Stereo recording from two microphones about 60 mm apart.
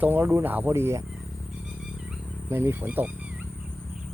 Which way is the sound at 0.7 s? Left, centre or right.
Right.